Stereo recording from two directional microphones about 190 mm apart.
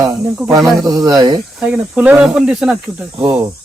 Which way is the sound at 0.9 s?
20° right (ahead or behind).